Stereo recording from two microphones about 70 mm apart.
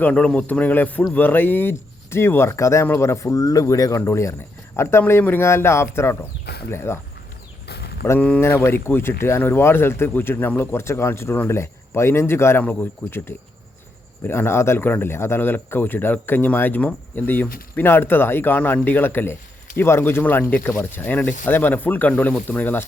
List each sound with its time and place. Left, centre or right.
0.0 s speech: centre; by 4.0 s left
4.0 s speech: left
8.0 s speech: left